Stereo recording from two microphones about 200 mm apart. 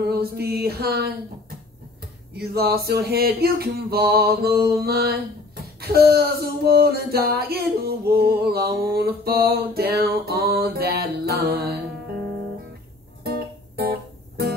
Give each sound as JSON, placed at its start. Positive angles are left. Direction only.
{"t": 0.0, "sound": "mantra", "side_deg": -50}
{"t": 2.3, "sound": "mantra", "side_deg": -50}
{"t": 13.2, "sound": "music", "side_deg": -50}